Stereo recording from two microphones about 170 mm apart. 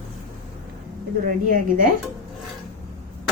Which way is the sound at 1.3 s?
55° right (ahead or behind).